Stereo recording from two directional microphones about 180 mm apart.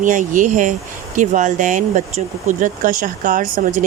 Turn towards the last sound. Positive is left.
turn(degrees=-45)  # may be behind; listen again after turning